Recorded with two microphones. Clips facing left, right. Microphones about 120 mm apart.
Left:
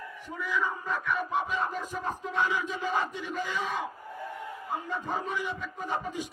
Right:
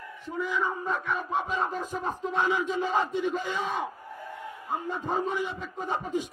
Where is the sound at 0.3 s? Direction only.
20° right (ahead or behind).